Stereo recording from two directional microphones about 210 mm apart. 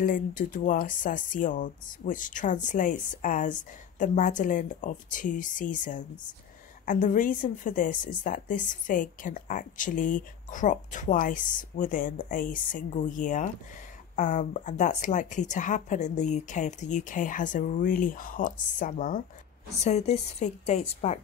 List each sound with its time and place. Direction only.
0.0 s a woman's voice: 40° left (ahead or behind)